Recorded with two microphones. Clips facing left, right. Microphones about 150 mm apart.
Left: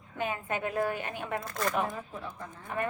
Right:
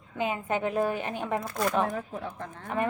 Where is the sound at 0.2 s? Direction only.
20° right (ahead or behind).